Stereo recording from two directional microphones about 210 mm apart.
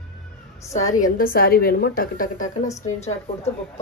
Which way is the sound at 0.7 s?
35° left (ahead or behind).